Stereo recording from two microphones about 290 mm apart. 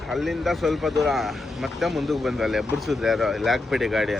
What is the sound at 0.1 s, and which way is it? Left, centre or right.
Speech, centre.